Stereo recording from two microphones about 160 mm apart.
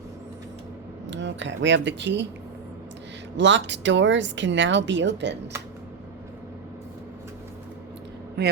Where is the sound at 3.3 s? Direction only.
90° right.